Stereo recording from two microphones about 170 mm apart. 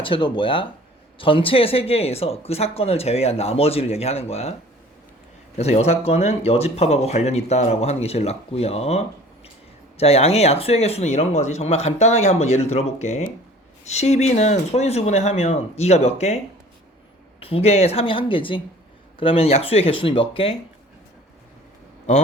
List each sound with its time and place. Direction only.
0.0 s speech: 30° left (ahead or behind)
5.5 s speech: 40° left (ahead or behind)
17.4 s speech: 35° left (ahead or behind)